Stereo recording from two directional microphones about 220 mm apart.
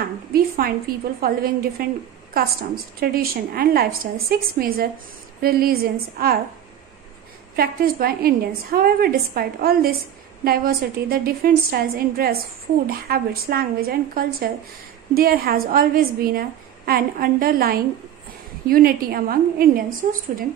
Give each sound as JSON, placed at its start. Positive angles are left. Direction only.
{"t": 0.3, "sound": "a woman's voice", "side_deg": -40}
{"t": 7.5, "sound": "a woman's voice", "side_deg": -45}